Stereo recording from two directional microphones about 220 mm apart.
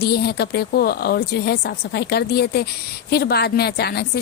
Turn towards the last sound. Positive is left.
turn(degrees=45)  # may be behind; listen again after turning